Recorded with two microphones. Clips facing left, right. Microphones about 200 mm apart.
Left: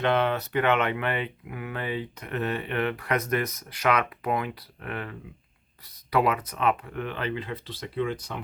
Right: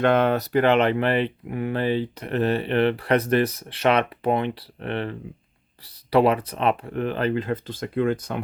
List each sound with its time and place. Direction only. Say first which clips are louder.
0.0 s speech: right 5 dB; 45° right (ahead or behind)